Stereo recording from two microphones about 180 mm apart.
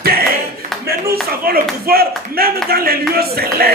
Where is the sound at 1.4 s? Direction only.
55° right (ahead or behind).